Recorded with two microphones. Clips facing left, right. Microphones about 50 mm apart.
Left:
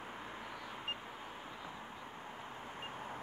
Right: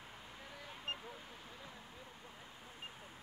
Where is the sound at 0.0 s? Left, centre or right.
Left.